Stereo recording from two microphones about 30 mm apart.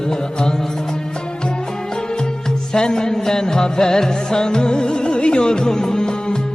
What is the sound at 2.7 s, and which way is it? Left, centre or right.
Music, left.